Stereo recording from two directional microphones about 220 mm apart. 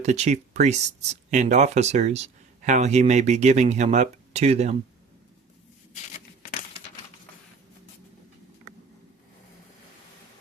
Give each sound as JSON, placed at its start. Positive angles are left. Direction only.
{"t": 0.0, "sound": "speech", "side_deg": -30}